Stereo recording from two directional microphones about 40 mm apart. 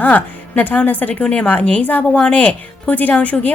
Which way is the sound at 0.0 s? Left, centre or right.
Left.